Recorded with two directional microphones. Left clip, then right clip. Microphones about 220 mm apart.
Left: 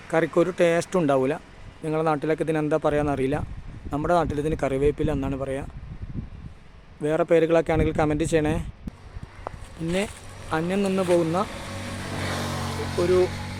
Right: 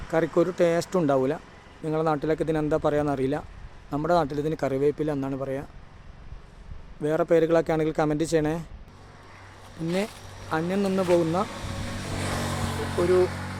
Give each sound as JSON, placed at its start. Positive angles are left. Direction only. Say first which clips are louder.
{"t": 0.1, "sound": "speech", "louder": "left 2 dB", "side_deg": 5}
{"t": 7.0, "sound": "speech", "louder": "left 1 dB", "side_deg": 5}
{"t": 10.5, "sound": "speech", "louder": "left 1 dB", "side_deg": 5}
{"t": 12.0, "sound": "vehicle", "louder": "left 1 dB", "side_deg": 15}
{"t": 12.4, "sound": "music", "louder": "even", "side_deg": 0}